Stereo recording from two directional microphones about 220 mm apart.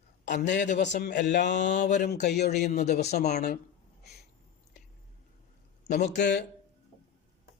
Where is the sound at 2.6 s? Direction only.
30° left (ahead or behind).